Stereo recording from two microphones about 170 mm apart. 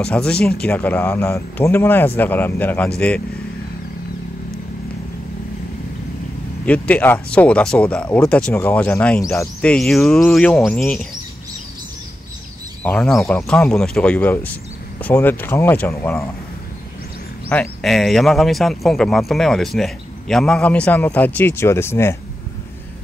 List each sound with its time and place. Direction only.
0.0 s speech: 5° left (ahead or behind)
6.6 s speech: 10° left (ahead or behind)
9.2 s speech: 15° left (ahead or behind)
9.6 s speech: 5° left (ahead or behind)
12.8 s speech: 5° left (ahead or behind)
13.2 s speech: 15° left (ahead or behind)
13.5 s speech: 5° left (ahead or behind)
17.5 s speech: 5° left (ahead or behind)